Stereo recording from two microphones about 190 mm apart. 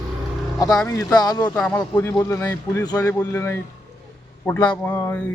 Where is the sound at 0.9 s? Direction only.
20° left (ahead or behind).